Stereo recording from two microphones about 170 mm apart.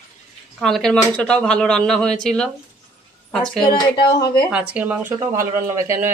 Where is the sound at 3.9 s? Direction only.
25° left (ahead or behind).